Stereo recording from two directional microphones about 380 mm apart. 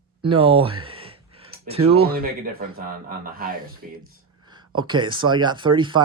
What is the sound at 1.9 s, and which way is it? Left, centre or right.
Speech, right.